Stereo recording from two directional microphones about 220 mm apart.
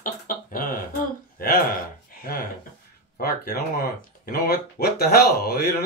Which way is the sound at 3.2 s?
45° left (ahead or behind).